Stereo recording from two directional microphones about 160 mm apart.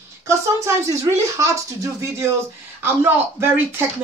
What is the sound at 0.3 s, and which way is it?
Speech, 15° right (ahead or behind).